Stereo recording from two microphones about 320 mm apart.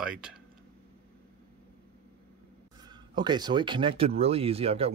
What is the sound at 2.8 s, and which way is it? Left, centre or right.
Speech, centre.